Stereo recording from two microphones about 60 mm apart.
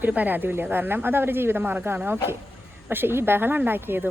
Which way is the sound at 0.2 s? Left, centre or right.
Right.